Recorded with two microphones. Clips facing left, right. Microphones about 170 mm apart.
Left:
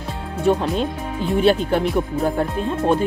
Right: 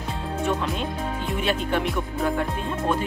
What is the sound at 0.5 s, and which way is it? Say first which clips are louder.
Speech: left 9 dB; 35° left (ahead or behind).